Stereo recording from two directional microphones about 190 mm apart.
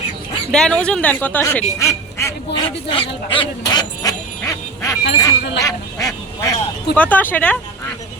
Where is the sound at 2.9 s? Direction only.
25° left (ahead or behind).